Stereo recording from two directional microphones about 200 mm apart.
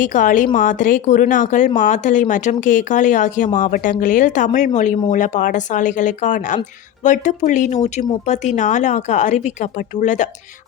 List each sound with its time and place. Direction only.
0.0 s speech: 40° left (ahead or behind)